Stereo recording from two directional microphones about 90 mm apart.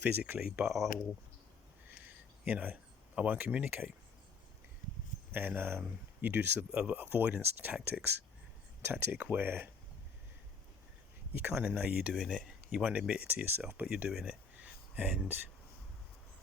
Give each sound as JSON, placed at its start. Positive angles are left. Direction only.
{"t": 0.0, "sound": "speech", "side_deg": -20}
{"t": 0.7, "sound": "speech", "side_deg": 0}
{"t": 2.0, "sound": "a sound", "side_deg": -15}
{"t": 3.2, "sound": "speech", "side_deg": -20}
{"t": 5.3, "sound": "speech", "side_deg": -25}
{"t": 11.3, "sound": "speech", "side_deg": -20}
{"t": 12.1, "sound": "speech", "side_deg": -5}
{"t": 12.8, "sound": "speech", "side_deg": -15}
{"t": 13.8, "sound": "speech", "side_deg": -10}
{"t": 14.3, "sound": "a sound", "side_deg": -15}